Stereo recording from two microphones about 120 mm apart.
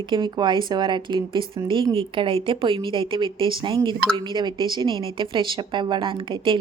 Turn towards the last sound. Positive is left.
turn(degrees=-45)  # may be behind; listen again after turning